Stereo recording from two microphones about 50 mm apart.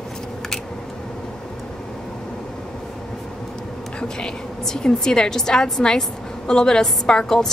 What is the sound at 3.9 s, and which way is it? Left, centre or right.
A woman's voice, centre.